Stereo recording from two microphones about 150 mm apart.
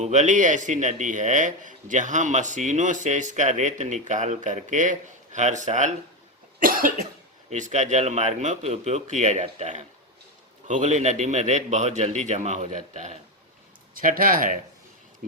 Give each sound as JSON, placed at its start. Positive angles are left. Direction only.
{"t": 0.0, "sound": "a man's voice", "side_deg": -50}
{"t": 6.6, "sound": "speech", "side_deg": -70}
{"t": 7.5, "sound": "a man's voice", "side_deg": -55}
{"t": 13.9, "sound": "speech", "side_deg": -65}